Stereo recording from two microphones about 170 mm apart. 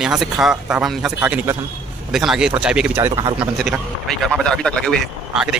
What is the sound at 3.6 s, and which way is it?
Speech, centre (ahead or behind).